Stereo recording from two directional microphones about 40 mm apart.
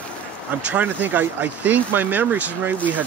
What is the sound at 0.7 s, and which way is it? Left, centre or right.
Speech, right.